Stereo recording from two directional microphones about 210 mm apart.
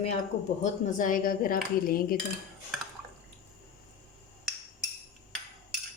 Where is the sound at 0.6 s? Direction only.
40° left (ahead or behind).